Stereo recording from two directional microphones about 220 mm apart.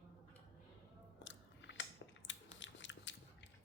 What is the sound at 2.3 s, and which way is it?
Scissors, 55° left (ahead or behind).